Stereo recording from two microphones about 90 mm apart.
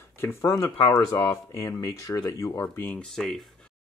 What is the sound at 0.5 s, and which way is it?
Speech, 40° left (ahead or behind).